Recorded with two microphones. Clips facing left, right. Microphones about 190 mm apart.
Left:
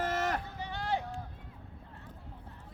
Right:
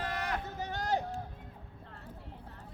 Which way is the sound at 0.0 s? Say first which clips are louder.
Left 4 dB; 45° left (ahead or behind).